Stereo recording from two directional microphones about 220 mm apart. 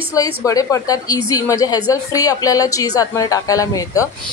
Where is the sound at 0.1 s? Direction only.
15° left (ahead or behind).